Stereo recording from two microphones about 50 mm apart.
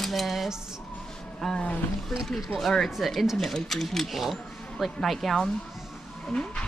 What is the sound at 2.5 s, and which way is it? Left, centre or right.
Speech, centre.